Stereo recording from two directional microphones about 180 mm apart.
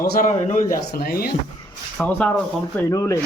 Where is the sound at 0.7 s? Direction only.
55° left (ahead or behind).